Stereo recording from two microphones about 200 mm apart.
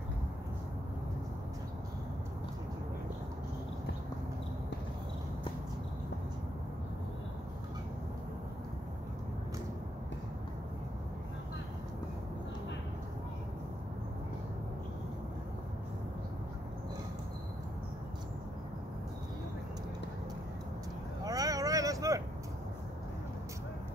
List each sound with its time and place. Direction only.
21.2 s vehicle: 15° right (ahead or behind)